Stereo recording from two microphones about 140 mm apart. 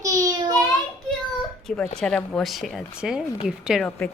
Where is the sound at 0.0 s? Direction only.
25° right (ahead or behind).